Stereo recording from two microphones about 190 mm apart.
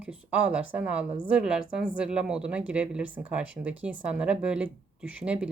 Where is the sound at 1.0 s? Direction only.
25° right (ahead or behind).